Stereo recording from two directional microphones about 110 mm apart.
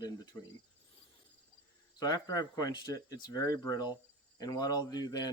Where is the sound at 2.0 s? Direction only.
35° left (ahead or behind).